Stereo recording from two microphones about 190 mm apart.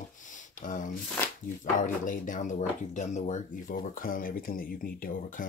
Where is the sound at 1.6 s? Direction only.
40° left (ahead or behind).